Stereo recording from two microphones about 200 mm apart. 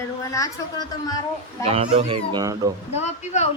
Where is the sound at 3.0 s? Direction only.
35° left (ahead or behind).